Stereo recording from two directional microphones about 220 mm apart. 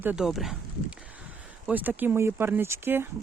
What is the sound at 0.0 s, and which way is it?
Speech, 5° right (ahead or behind).